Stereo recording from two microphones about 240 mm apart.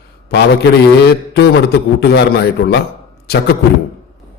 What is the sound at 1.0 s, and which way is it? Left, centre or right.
A man's voice, left.